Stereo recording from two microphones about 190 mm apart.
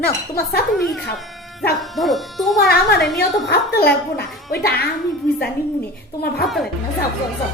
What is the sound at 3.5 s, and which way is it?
Speech, 60° left (ahead or behind).